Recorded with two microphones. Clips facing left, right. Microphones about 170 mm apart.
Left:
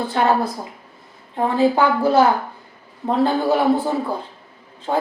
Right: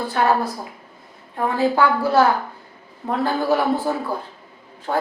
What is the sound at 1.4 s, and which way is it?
Speech, 20° left (ahead or behind).